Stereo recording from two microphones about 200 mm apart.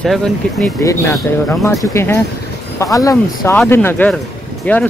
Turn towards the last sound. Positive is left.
turn(degrees=10)  # may be behind; listen again after turning